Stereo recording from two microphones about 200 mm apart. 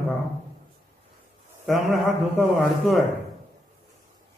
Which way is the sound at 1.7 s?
Centre (ahead or behind).